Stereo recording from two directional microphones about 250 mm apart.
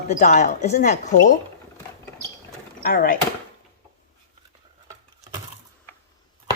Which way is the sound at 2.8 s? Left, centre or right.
Left.